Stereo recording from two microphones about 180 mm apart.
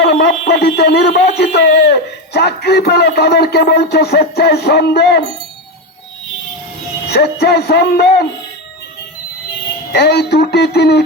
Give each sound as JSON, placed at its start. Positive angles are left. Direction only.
{"t": 0.0, "sound": "speech", "side_deg": 65}
{"t": 7.1, "sound": "speech", "side_deg": 65}
{"t": 9.9, "sound": "speech", "side_deg": 65}